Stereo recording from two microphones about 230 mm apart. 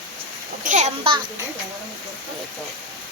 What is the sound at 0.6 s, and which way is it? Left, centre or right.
Speech, right.